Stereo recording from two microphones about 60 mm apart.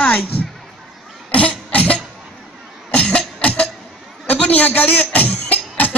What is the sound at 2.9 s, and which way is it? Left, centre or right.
Cough, left.